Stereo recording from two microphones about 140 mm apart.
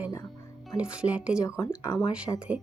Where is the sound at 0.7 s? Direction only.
5° right (ahead or behind).